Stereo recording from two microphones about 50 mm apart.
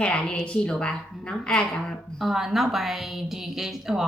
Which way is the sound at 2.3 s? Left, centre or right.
Centre.